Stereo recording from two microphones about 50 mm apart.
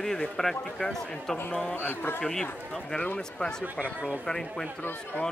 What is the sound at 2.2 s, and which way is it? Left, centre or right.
Speech, centre.